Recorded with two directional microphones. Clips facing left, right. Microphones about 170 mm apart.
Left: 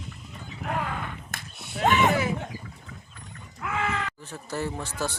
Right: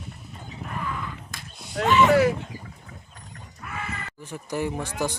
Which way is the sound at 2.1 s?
70° right (ahead or behind).